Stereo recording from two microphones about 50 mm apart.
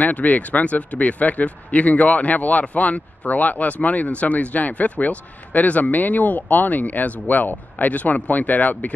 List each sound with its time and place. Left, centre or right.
0.0 s speech: left